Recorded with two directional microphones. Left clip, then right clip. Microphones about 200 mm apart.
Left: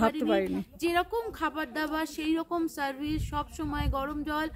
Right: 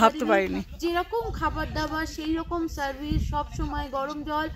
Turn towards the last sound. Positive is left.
turn(degrees=15)  # may be behind; listen again after turning